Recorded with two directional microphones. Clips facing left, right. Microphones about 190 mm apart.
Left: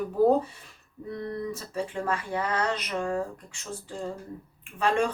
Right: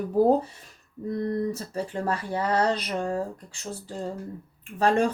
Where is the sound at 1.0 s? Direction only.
40° right (ahead or behind).